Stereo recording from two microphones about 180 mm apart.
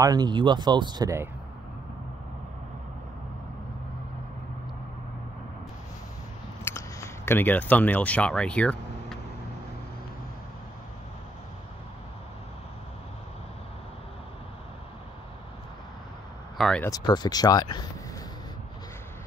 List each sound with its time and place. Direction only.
0.0 s speech: 20° right (ahead or behind)
6.6 s camera: 15° left (ahead or behind)
16.5 s speech: centre (ahead or behind)
16.8 s speech: 20° left (ahead or behind)